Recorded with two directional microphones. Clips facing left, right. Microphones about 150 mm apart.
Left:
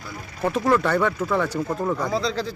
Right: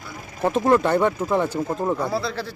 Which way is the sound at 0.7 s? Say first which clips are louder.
Right 2 dB; 25° right (ahead or behind).